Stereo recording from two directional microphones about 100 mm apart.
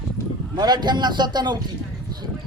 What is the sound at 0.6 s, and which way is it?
Speech, 45° right (ahead or behind).